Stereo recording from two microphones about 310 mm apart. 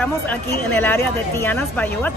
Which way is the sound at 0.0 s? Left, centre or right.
Centre.